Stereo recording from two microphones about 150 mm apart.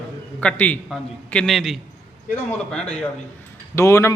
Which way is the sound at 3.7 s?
20° left (ahead or behind).